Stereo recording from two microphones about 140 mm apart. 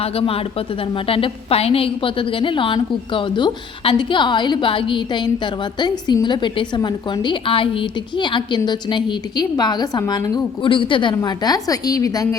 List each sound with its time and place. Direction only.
0.0 s a woman's voice: 40° left (ahead or behind)
11.2 s a woman's voice: 25° left (ahead or behind)